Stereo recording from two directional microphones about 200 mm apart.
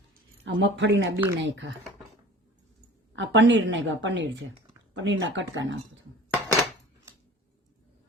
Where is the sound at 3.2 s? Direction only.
65° right (ahead or behind).